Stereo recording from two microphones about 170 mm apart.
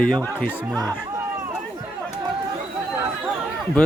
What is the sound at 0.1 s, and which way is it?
Speech, 5° left (ahead or behind).